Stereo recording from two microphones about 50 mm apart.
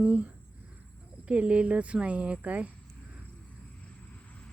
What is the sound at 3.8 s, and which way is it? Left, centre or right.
Vehicle, left.